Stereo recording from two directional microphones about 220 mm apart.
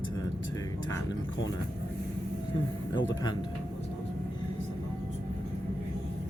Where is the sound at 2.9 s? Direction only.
20° left (ahead or behind).